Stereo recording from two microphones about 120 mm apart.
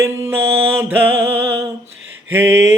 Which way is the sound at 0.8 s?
20° right (ahead or behind).